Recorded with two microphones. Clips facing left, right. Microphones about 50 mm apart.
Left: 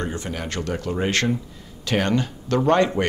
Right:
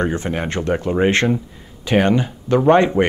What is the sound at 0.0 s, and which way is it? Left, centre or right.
Speech, right.